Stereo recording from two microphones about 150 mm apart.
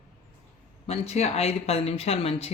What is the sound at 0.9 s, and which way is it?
Speech, 45° left (ahead or behind).